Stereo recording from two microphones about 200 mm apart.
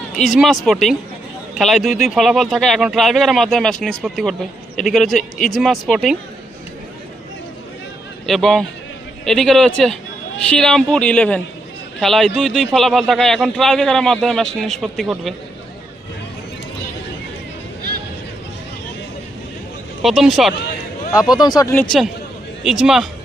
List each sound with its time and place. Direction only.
0.3 s speech: centre (ahead or behind)
8.3 s speech: centre (ahead or behind)
20.0 s speech: centre (ahead or behind)
21.1 s speech: 20° left (ahead or behind); by 23.0 s centre (ahead or behind)